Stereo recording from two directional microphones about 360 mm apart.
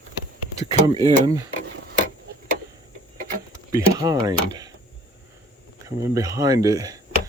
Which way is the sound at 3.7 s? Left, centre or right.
Centre.